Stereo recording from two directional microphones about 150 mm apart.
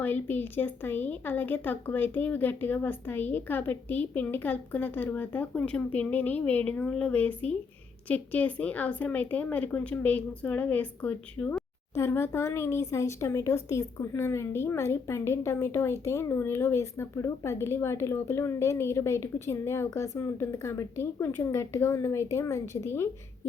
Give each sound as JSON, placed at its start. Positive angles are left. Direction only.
{"t": 0.0, "sound": "speech", "side_deg": 10}